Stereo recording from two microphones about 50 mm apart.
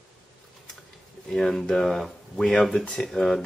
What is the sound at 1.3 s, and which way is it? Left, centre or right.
Speech, centre.